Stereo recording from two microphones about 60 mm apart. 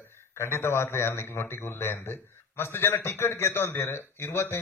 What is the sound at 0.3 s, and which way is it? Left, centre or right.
A man's voice, left.